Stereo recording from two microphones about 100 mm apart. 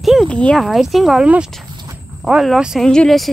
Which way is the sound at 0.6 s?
Centre (ahead or behind).